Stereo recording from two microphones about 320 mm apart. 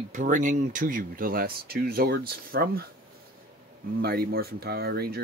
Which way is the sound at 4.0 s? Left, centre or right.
Right.